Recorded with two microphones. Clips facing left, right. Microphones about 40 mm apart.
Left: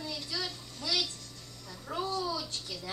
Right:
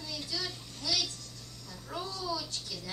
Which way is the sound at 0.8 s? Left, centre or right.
Left.